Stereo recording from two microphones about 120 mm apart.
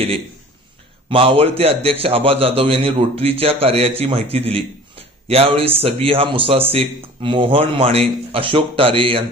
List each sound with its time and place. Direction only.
1.1 s a man's voice: 50° right (ahead or behind)